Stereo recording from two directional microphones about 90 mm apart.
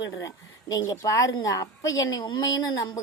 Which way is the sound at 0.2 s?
40° left (ahead or behind).